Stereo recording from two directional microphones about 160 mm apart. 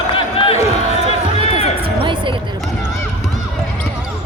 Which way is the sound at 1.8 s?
30° right (ahead or behind).